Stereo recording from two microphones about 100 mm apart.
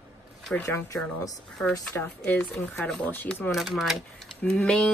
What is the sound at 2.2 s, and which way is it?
Speech, 15° left (ahead or behind).